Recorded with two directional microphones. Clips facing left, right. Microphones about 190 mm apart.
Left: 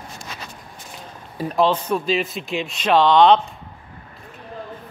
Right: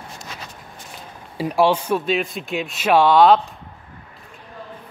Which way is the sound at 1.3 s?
10° right (ahead or behind).